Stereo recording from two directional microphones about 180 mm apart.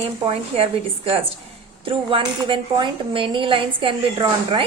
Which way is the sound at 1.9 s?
30° right (ahead or behind).